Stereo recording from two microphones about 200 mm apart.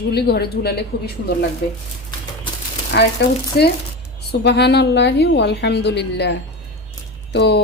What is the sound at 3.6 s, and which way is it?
A woman's voice, 50° left (ahead or behind).